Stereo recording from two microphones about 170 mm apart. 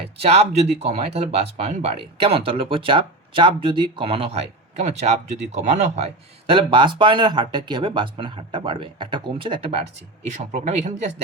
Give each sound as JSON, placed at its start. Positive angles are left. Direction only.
{"t": 0.2, "sound": "speech", "side_deg": -35}
{"t": 6.5, "sound": "speech", "side_deg": -30}
{"t": 10.2, "sound": "speech", "side_deg": -45}